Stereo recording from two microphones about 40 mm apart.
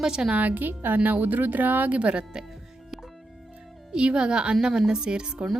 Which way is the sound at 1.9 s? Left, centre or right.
Right.